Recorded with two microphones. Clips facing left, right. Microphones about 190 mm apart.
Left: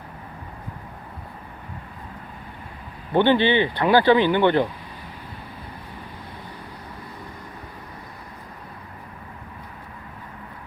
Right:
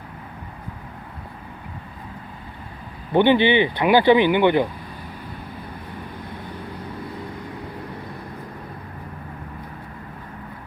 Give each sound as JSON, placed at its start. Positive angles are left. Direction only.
{"t": 3.1, "sound": "speech", "side_deg": -15}